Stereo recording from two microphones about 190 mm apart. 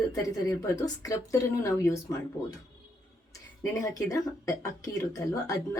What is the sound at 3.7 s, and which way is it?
A woman's voice, 15° left (ahead or behind).